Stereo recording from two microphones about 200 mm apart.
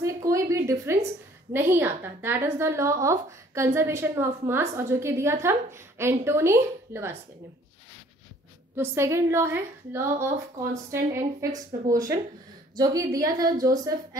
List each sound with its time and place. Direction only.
0.0 s a woman's voice: 15° right (ahead or behind)
8.7 s a woman's voice: 15° right (ahead or behind)
11.5 s a woman's voice: 15° right (ahead or behind)